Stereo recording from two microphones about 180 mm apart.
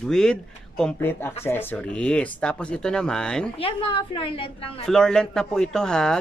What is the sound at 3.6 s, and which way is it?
A woman's voice, 30° left (ahead or behind).